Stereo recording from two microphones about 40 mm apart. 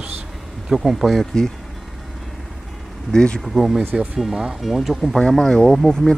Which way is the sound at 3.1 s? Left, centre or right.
Centre.